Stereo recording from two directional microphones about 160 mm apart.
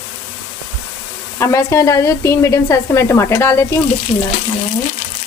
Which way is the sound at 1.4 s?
20° left (ahead or behind).